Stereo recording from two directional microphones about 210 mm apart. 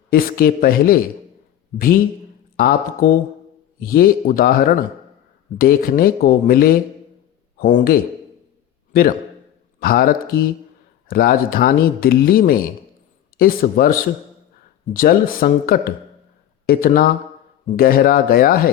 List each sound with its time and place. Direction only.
0.1 s speech: 45° left (ahead or behind)
2.6 s a man's voice: 45° left (ahead or behind)
14.9 s speech: 40° left (ahead or behind)